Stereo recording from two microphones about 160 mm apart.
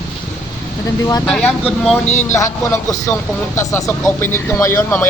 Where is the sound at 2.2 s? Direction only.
15° left (ahead or behind).